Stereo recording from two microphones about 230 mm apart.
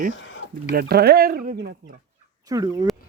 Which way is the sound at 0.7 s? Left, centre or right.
Right.